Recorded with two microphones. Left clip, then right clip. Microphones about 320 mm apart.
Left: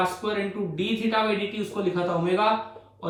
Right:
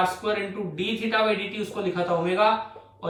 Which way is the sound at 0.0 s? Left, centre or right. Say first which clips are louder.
Right 1 dB; centre.